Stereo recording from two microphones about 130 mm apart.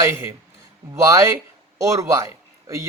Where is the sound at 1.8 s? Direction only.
25° right (ahead or behind).